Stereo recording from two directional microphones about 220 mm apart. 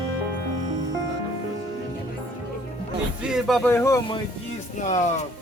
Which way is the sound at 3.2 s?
Centre (ahead or behind).